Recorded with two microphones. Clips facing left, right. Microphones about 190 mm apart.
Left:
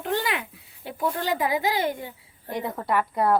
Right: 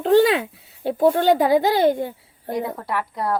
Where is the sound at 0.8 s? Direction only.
70° right (ahead or behind).